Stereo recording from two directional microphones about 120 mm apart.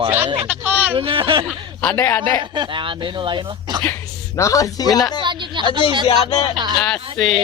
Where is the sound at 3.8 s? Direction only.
25° left (ahead or behind).